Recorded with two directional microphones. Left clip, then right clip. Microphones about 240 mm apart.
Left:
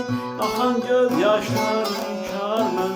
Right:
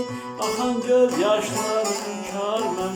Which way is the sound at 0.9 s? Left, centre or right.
Centre.